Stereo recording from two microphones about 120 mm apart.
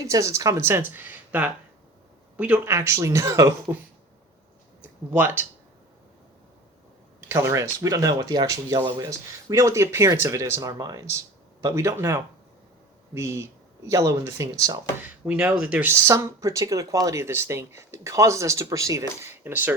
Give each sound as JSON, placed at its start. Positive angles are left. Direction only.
{"t": 0.1, "sound": "speech", "side_deg": -25}
{"t": 2.7, "sound": "speech", "side_deg": -25}
{"t": 4.8, "sound": "speech", "side_deg": -15}
{"t": 7.2, "sound": "speech", "side_deg": -20}
{"t": 15.0, "sound": "speech", "side_deg": -15}